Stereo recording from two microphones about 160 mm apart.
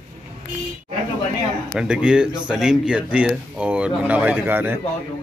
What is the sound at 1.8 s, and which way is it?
Speech, 5° right (ahead or behind).